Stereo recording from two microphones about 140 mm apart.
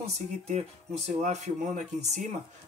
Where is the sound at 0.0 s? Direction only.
50° right (ahead or behind).